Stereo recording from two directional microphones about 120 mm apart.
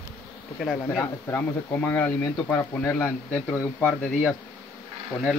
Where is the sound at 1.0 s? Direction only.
15° left (ahead or behind).